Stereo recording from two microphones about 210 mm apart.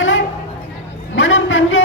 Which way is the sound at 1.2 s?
65° left (ahead or behind).